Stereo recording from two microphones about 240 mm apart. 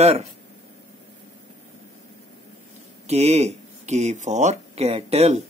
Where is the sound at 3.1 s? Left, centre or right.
Right.